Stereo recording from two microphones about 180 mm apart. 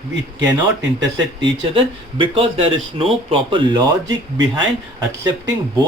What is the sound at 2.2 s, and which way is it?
Speech, 30° right (ahead or behind).